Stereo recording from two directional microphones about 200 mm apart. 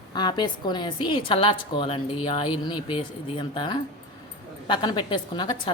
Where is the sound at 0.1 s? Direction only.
20° left (ahead or behind).